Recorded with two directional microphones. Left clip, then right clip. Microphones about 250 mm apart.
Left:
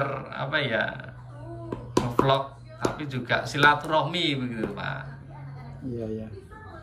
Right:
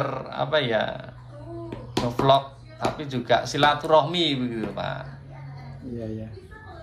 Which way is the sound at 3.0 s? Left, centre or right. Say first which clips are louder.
Right 8 dB; centre.